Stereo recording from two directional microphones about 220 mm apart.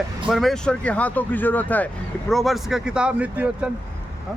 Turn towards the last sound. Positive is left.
turn(degrees=-5)  # may be behind; listen again after turning